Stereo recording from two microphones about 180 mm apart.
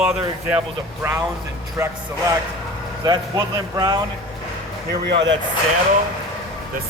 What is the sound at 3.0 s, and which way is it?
Speech, 20° right (ahead or behind).